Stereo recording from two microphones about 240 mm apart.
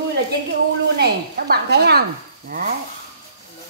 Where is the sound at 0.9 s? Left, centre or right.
Right.